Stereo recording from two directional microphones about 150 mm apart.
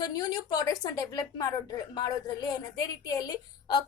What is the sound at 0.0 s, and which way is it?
A woman's voice, 25° left (ahead or behind).